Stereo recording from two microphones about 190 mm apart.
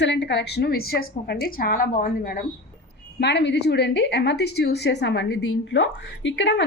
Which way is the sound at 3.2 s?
65° left (ahead or behind).